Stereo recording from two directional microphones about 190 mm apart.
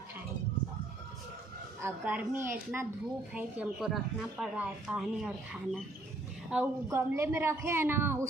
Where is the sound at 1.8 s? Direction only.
10° right (ahead or behind).